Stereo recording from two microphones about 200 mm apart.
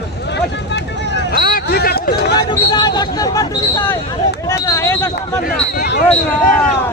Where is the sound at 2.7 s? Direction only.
20° left (ahead or behind).